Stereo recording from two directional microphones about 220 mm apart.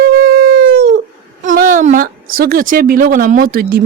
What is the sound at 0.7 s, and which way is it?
Dog, 40° right (ahead or behind).